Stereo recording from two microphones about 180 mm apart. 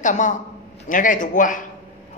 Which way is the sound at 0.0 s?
45° left (ahead or behind).